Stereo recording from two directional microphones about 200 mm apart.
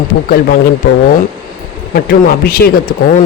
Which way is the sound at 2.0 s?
50° left (ahead or behind).